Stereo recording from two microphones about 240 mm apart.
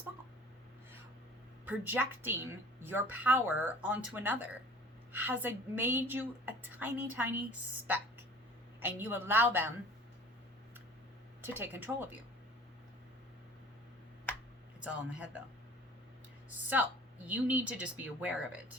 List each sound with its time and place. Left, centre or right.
1.6 s a woman's voice: centre
8.8 s a woman's voice: centre
11.4 s a woman's voice: centre
14.8 s speech: centre
17.2 s speech: centre